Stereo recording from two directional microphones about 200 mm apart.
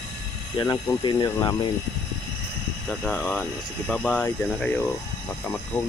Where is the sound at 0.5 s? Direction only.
15° left (ahead or behind).